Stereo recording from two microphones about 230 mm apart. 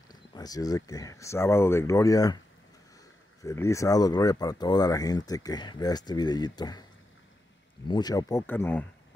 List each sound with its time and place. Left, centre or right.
0.1 s speech: centre
3.4 s speech: centre
7.9 s speech: centre